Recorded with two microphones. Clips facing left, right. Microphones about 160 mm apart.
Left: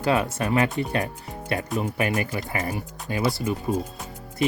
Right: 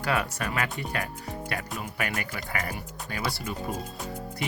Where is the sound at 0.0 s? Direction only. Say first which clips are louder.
Left 6 dB; 25° left (ahead or behind).